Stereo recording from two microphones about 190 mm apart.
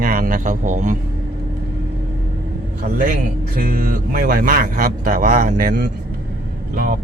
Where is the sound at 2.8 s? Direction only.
45° right (ahead or behind).